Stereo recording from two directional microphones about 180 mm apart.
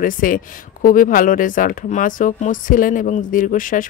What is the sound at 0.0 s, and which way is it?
Speech, 50° left (ahead or behind).